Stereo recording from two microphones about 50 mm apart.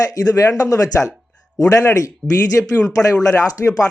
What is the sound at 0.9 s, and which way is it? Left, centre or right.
Speech, left.